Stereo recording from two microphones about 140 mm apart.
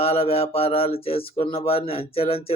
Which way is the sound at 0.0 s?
45° left (ahead or behind).